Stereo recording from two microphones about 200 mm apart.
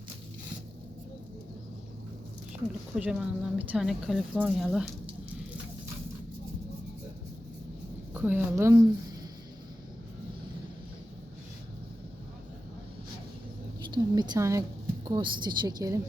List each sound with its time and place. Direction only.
2.9 s speech: 5° right (ahead or behind)
8.1 s a woman's voice: 10° right (ahead or behind)
13.9 s a sound: 20° right (ahead or behind)
15.0 s a woman's voice: 20° right (ahead or behind)